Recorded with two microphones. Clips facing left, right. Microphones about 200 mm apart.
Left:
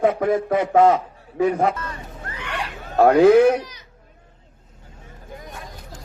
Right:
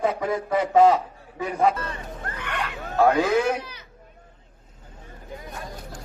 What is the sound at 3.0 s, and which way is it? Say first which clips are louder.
Speech: left 8 dB; 60° left (ahead or behind).